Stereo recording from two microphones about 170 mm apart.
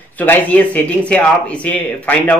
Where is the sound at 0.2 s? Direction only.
10° left (ahead or behind).